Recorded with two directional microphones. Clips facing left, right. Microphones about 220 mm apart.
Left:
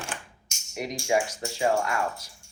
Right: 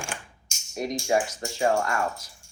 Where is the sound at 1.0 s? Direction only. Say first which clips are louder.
Left 1 dB; 10° left (ahead or behind).